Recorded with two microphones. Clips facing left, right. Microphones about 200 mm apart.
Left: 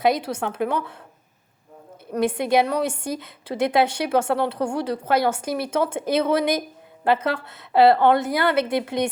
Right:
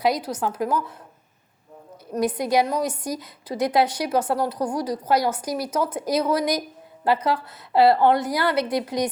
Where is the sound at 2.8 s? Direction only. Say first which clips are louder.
Left 1 dB; 25° left (ahead or behind).